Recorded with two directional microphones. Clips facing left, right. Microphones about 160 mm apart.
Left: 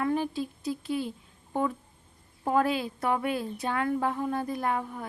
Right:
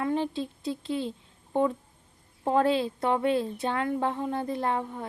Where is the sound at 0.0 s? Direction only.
25° right (ahead or behind).